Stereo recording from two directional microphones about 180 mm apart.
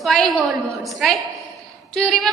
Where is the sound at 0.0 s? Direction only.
Centre (ahead or behind).